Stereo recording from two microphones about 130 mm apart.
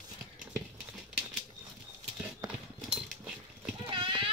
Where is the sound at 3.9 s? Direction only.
40° right (ahead or behind).